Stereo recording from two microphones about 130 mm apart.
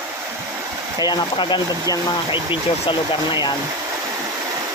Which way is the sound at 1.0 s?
35° left (ahead or behind).